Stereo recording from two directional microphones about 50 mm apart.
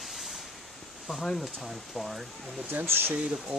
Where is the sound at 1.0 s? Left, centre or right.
Centre.